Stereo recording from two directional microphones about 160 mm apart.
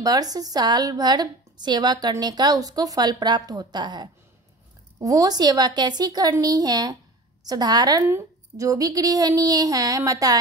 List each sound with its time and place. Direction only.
0.0 s a woman's voice: 25° right (ahead or behind)